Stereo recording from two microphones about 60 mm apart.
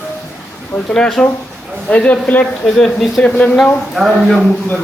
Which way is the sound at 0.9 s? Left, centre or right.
Centre.